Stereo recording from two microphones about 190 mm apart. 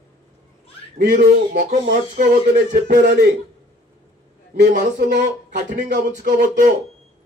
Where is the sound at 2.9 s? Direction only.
60° right (ahead or behind).